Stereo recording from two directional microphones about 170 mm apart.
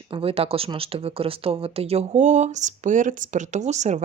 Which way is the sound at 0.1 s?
35° right (ahead or behind).